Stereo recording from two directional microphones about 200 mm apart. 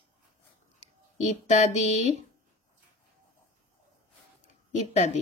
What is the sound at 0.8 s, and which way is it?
Speech, 35° left (ahead or behind).